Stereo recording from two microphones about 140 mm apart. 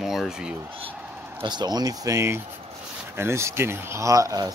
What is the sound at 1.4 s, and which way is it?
Speech, 30° right (ahead or behind).